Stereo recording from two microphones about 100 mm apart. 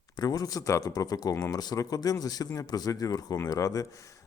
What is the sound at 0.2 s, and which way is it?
Speech, 40° left (ahead or behind).